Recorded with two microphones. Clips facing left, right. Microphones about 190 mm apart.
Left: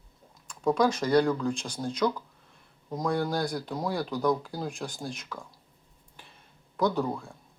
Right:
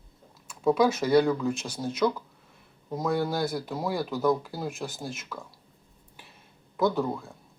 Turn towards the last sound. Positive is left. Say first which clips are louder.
# right 1 dB
turn(degrees=0)  # may be behind; listen again after turning